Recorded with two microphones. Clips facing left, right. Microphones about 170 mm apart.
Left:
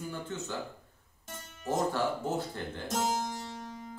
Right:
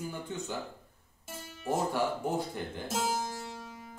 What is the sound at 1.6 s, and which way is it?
Speech, 10° right (ahead or behind).